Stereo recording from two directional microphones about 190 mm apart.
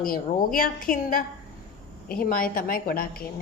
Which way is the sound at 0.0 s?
50° left (ahead or behind).